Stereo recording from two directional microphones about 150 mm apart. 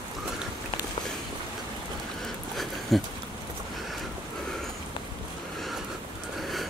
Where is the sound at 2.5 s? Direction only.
Centre (ahead or behind).